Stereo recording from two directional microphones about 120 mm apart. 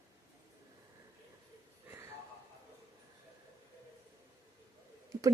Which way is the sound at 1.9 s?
25° right (ahead or behind).